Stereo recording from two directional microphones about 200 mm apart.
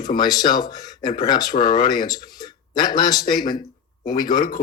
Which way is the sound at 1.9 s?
20° left (ahead or behind).